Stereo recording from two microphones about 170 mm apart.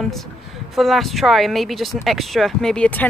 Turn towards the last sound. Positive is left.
turn(degrees=5)  # may be behind; listen again after turning